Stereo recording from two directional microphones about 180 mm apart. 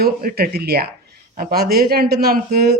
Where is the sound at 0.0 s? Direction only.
55° right (ahead or behind).